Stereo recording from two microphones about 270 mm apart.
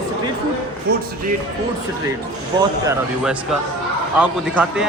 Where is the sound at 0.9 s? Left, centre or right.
Right.